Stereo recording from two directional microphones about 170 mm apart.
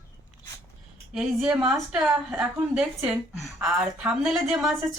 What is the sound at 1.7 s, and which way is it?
A woman's voice, 5° right (ahead or behind).